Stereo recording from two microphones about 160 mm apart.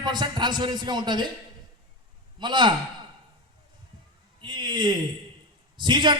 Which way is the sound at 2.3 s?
30° right (ahead or behind).